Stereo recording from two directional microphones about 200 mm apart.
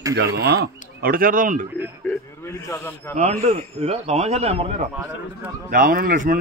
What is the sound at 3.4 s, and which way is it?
A man's voice, 35° right (ahead or behind).